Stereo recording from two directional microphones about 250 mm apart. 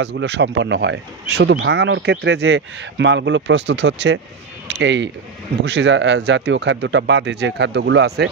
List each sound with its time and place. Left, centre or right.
0.0 s speech: right